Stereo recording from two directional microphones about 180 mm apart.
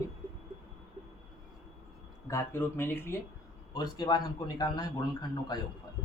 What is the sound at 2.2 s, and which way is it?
Speech, 15° left (ahead or behind).